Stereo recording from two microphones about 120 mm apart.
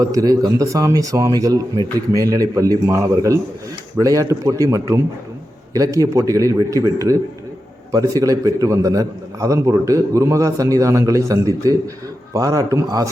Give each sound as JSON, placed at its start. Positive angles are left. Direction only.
{"t": 0.0, "sound": "a man's voice", "side_deg": -30}